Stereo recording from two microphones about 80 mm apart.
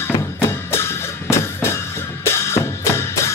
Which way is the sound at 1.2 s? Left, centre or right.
Left.